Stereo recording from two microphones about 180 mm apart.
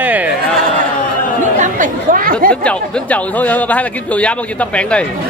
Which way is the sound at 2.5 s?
5° left (ahead or behind).